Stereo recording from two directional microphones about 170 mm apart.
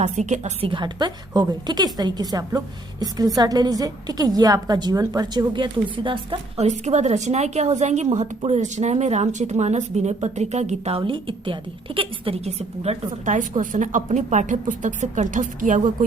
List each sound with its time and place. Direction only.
0.0 s a woman's voice: 45° right (ahead or behind)
6.7 s a woman's voice: 40° right (ahead or behind)